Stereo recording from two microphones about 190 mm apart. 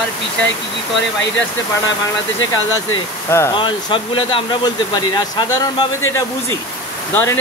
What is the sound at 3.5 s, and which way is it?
Speech, 25° left (ahead or behind).